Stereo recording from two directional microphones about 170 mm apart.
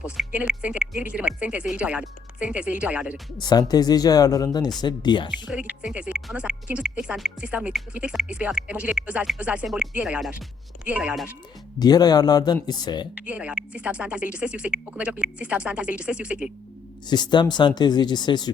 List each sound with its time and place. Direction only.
0.3 s speech: 10° right (ahead or behind)
3.4 s speech: 25° left (ahead or behind)
5.3 s speech: 5° right (ahead or behind)
11.8 s speech: 25° left (ahead or behind)
13.1 s speech: 10° right (ahead or behind)
17.1 s speech: 25° left (ahead or behind)